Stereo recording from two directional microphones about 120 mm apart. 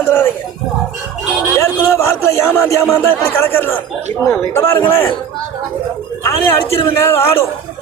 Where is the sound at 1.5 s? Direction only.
25° left (ahead or behind).